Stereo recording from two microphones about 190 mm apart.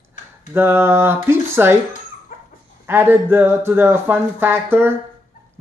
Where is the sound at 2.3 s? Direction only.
45° left (ahead or behind).